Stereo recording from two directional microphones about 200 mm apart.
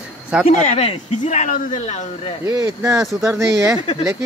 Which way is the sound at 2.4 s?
15° right (ahead or behind).